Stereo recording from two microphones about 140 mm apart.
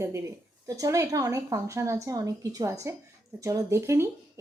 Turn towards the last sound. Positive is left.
turn(degrees=-20)  # may be behind; listen again after turning